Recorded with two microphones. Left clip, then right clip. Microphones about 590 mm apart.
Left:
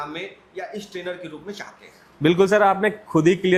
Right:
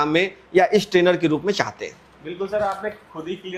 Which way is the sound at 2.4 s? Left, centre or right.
Left.